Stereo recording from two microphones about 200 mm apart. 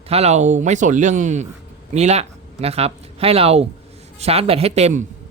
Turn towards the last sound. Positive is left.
turn(degrees=-35)  # may be behind; listen again after turning